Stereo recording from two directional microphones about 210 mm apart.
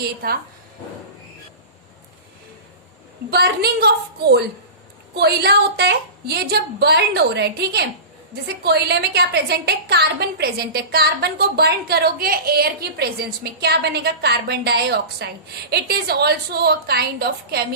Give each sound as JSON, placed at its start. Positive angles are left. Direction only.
{"t": 0.0, "sound": "a woman's voice", "side_deg": -45}
{"t": 3.2, "sound": "a woman's voice", "side_deg": -50}